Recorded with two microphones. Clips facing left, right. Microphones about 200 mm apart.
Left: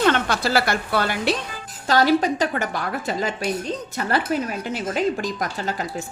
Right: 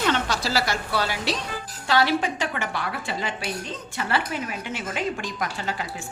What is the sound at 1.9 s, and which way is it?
A woman's voice, 40° left (ahead or behind).